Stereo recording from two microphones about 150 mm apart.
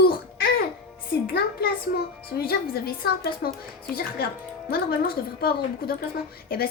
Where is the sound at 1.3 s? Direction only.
90° left.